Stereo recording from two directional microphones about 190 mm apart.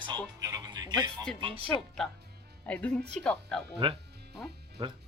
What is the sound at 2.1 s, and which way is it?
Music, 60° right (ahead or behind).